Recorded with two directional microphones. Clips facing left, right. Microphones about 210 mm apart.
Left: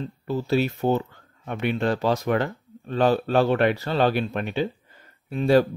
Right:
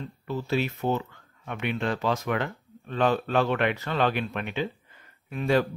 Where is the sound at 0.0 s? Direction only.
35° left (ahead or behind).